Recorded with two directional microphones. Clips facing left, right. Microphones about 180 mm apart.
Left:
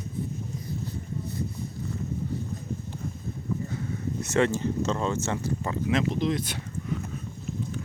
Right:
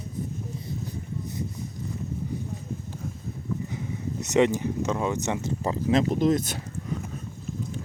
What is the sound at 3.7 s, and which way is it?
Speech, 15° right (ahead or behind).